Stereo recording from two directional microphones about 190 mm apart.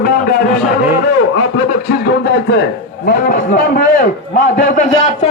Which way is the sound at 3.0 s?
45° left (ahead or behind).